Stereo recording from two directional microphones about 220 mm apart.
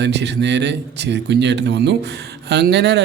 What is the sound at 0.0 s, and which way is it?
Speech, 50° right (ahead or behind).